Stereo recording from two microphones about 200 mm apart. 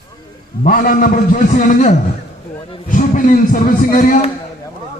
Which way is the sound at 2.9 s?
40° left (ahead or behind).